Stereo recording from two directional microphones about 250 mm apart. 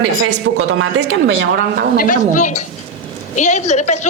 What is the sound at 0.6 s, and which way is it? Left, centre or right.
Speech, right.